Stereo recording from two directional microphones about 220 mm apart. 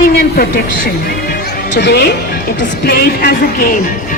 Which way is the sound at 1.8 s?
50° left (ahead or behind).